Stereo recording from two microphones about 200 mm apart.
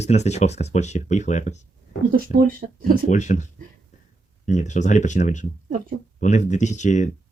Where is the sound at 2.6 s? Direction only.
45° right (ahead or behind).